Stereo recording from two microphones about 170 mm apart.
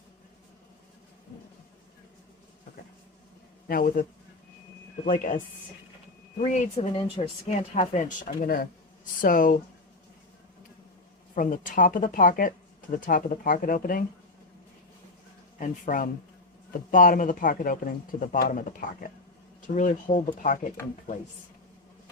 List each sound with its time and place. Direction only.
3.7 s a man's voice: 55° left (ahead or behind)
5.0 s speech: 55° left (ahead or behind)
6.4 s speech: 40° left (ahead or behind)
11.3 s speech: 50° left (ahead or behind)
15.5 s speech: 50° left (ahead or behind)